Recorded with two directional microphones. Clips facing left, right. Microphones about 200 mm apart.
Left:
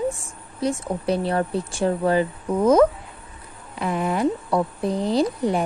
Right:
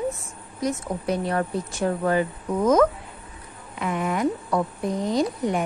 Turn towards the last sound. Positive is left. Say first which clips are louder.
# left 2 dB
turn(degrees=30)  # may be behind; listen again after turning